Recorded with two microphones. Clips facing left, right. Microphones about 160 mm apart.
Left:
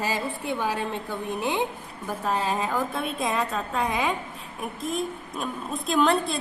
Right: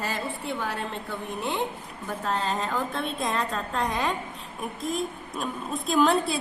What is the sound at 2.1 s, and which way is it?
A woman's voice, 10° left (ahead or behind).